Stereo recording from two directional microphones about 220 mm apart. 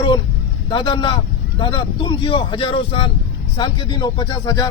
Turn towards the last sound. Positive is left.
turn(degrees=20)  # may be behind; listen again after turning